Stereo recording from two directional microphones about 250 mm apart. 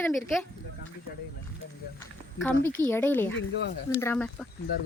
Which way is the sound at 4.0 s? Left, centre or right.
Centre.